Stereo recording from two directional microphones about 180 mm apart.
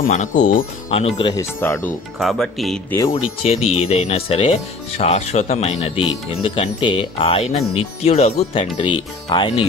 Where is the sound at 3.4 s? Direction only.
35° left (ahead or behind).